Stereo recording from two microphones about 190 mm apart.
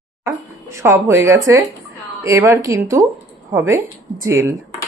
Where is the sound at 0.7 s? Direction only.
15° right (ahead or behind).